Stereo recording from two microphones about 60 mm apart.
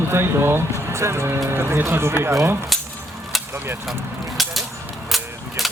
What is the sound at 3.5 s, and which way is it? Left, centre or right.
Speech, right.